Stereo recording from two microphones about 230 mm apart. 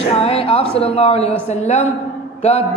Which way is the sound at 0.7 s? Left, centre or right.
Left.